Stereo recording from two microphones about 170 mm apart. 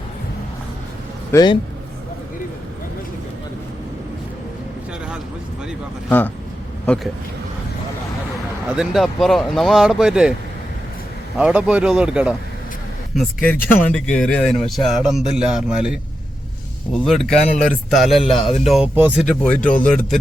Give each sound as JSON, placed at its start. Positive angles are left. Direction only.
{"t": 1.3, "sound": "a man's voice", "side_deg": 20}
{"t": 6.1, "sound": "speech", "side_deg": 10}
{"t": 8.7, "sound": "speech", "side_deg": -5}
{"t": 11.3, "sound": "speech", "side_deg": -5}
{"t": 13.1, "sound": "speech", "side_deg": 10}
{"t": 19.5, "sound": "speech", "side_deg": 10}